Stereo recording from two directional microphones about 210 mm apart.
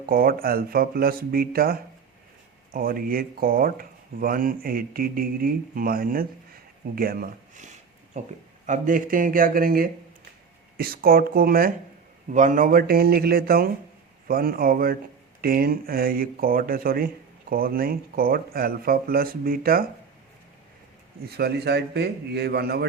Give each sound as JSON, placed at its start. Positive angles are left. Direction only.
{"t": 0.0, "sound": "speech", "side_deg": -45}
{"t": 21.2, "sound": "speech", "side_deg": -50}